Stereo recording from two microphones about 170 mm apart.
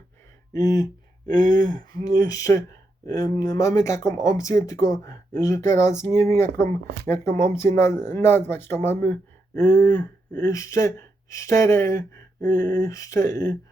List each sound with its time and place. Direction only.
0.5 s speech: 20° left (ahead or behind)